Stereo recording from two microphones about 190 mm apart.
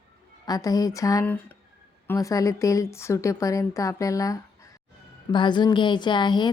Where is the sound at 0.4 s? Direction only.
20° left (ahead or behind).